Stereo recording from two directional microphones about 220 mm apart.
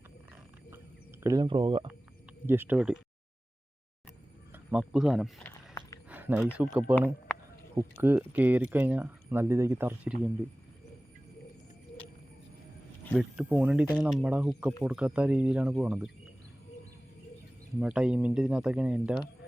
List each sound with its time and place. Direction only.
1.2 s speech: 15° right (ahead or behind)
2.5 s speech: 10° right (ahead or behind)
4.5 s speech: 5° right (ahead or behind)
5.5 s a sound: 15° left (ahead or behind)
6.1 s speech: 5° right (ahead or behind)
13.1 s speech: 5° right (ahead or behind)
17.7 s speech: 5° right (ahead or behind)